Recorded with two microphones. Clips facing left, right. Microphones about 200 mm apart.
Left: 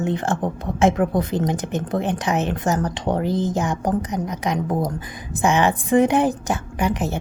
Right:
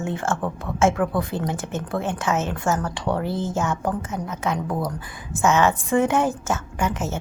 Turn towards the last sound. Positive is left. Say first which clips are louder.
# left 3 dB
turn(degrees=15)  # may be behind; listen again after turning